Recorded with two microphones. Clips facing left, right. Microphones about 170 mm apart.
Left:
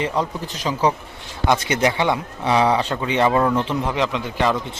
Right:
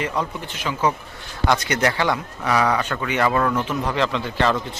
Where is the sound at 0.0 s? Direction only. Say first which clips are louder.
Left 2 dB; 35° left (ahead or behind).